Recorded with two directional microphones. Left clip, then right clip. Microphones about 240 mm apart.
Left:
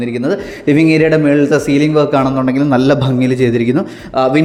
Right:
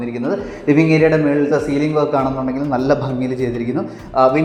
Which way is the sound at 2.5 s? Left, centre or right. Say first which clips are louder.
Left 7 dB; left.